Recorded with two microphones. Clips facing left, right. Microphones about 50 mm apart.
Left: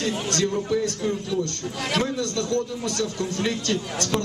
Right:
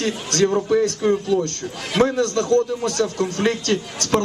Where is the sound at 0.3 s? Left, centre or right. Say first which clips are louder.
Right 8 dB; right.